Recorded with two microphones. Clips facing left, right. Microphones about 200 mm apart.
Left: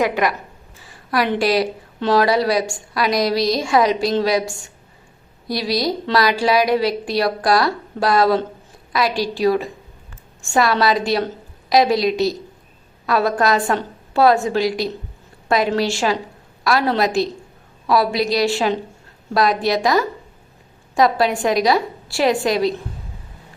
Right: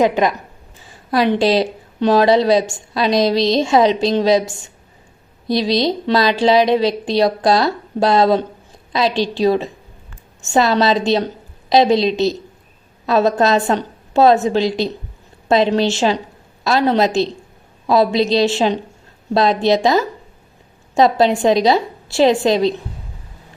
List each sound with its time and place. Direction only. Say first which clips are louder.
0.0 s a woman's voice: right 4 dB; 20° right (ahead or behind)